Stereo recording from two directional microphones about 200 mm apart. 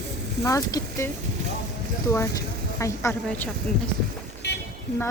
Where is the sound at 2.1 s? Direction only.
15° left (ahead or behind).